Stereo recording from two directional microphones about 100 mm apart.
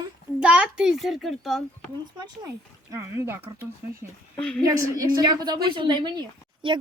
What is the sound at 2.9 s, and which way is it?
Speech, 25° right (ahead or behind).